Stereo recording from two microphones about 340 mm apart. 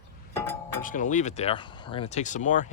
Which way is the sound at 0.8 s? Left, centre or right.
Left.